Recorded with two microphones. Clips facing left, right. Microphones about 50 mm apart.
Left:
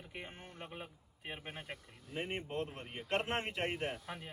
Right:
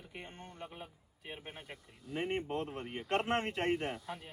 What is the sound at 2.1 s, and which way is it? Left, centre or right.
A man's voice, centre.